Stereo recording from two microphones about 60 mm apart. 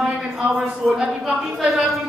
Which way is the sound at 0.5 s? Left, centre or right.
Centre.